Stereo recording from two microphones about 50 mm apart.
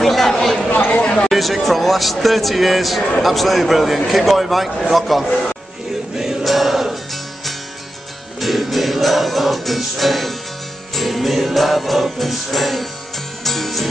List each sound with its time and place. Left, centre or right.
0.0 s speech: centre
0.7 s chatter: left
1.3 s a man's voice: centre
6.1 s music: centre
8.4 s music: centre